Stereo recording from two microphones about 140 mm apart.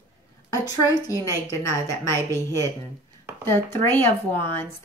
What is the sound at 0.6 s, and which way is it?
A woman's voice, 30° left (ahead or behind).